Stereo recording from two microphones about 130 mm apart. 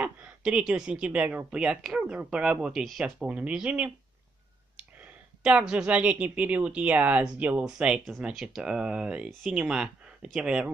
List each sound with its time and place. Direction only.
0.0 s a woman's voice: 10° right (ahead or behind)